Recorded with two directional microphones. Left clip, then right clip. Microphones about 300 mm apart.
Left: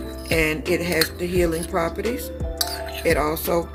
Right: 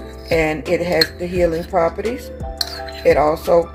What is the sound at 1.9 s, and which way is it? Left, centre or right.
Speech, centre.